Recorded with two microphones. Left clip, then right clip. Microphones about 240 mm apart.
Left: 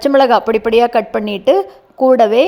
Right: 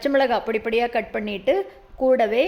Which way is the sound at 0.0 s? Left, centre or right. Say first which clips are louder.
Left 10 dB; left.